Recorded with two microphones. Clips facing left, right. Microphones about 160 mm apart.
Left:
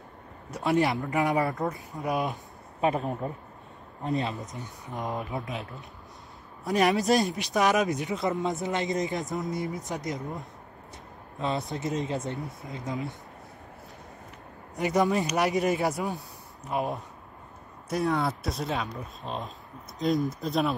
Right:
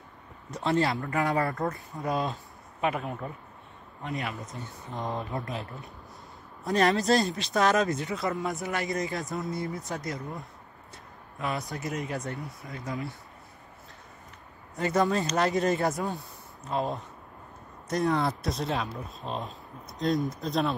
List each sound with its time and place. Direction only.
0.7 s speech: 15° left (ahead or behind)
2.8 s speech: 35° left (ahead or behind)
5.0 s speech: 5° left (ahead or behind)
6.6 s speech: 15° left (ahead or behind)
14.8 s speech: 15° left (ahead or behind)